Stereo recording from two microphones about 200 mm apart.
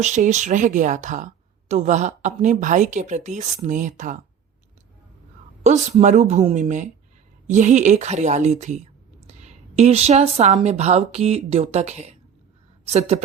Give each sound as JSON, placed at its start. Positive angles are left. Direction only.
{"t": 0.0, "sound": "speech", "side_deg": -35}
{"t": 5.6, "sound": "speech", "side_deg": -35}